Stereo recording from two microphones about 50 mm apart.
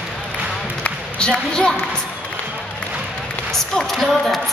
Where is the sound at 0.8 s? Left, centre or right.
Left.